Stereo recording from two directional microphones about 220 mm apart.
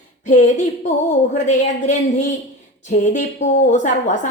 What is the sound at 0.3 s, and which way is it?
A woman's voice, 35° left (ahead or behind).